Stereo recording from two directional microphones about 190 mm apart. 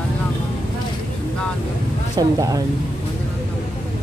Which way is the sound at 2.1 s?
20° right (ahead or behind).